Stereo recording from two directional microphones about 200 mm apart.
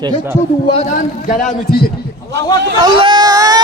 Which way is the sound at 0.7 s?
35° left (ahead or behind).